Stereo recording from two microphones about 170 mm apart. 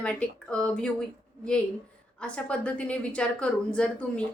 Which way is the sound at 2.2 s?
5° left (ahead or behind).